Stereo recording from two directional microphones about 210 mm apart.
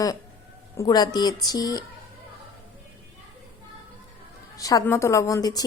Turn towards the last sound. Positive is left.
turn(degrees=20)  # may be behind; listen again after turning